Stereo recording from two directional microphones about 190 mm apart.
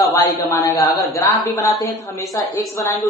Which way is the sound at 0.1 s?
15° left (ahead or behind).